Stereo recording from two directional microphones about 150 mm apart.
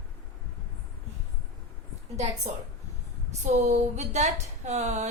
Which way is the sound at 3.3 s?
50° right (ahead or behind).